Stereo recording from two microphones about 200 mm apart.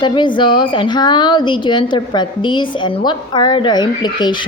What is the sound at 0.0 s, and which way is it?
A woman's voice, 25° left (ahead or behind).